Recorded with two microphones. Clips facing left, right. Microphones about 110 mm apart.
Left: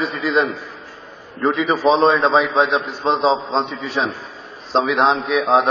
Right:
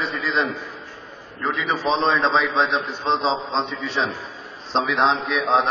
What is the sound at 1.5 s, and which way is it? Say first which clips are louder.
A man's voice: left 6 dB; 5° left (ahead or behind).